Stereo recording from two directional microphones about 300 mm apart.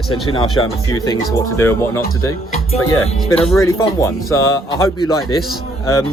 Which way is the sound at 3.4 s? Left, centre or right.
Centre.